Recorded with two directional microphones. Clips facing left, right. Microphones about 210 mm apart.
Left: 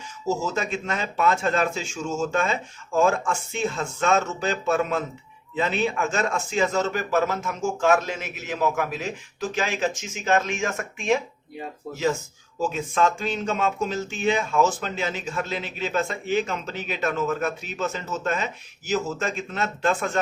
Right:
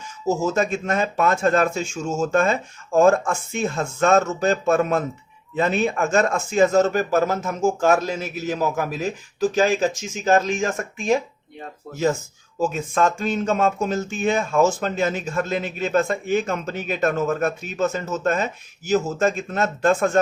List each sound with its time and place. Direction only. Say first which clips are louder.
0.4 s speech: right 6 dB; 45° right (ahead or behind)
11.9 s speech: even; centre (ahead or behind)
12.7 s speech: even; 45° right (ahead or behind)